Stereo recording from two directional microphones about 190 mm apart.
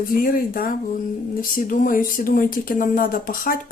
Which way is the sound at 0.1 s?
45° left (ahead or behind).